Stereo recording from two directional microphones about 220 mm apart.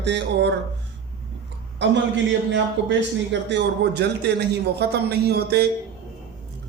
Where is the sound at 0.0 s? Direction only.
50° right (ahead or behind).